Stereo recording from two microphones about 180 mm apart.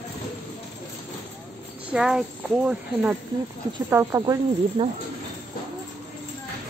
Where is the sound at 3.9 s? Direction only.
15° right (ahead or behind).